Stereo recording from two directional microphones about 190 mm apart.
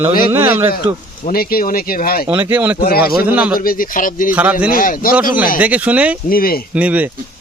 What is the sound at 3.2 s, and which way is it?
Speech, 5° right (ahead or behind).